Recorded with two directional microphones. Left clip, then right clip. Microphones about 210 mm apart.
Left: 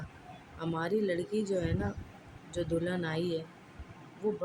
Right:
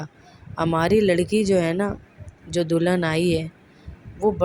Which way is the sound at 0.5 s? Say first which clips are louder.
Right 13 dB; 40° right (ahead or behind).